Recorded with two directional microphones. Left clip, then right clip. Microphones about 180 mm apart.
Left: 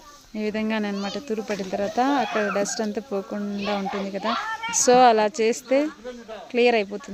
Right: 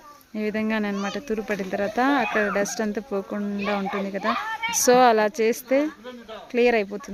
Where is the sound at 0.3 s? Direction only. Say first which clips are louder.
Even; centre (ahead or behind).